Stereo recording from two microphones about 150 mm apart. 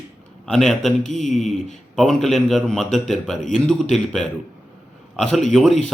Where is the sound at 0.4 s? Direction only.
5° left (ahead or behind).